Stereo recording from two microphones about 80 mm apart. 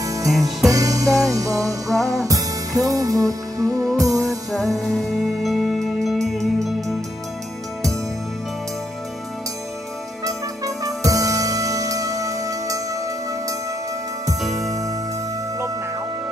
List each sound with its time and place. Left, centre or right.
0.0 s music: right
0.3 s music: centre
0.7 s music: right
4.5 s music: centre
10.2 s music: right
14.4 s music: centre
14.7 s music: right